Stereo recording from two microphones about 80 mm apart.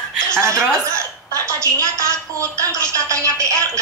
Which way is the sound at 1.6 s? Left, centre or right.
Right.